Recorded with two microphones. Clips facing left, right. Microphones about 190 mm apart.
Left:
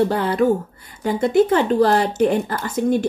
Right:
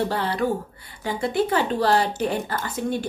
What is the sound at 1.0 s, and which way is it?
Speech, 45° left (ahead or behind).